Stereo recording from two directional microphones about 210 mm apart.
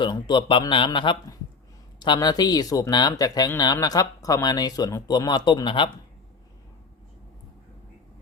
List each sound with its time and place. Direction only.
0.0 s speech: 20° left (ahead or behind)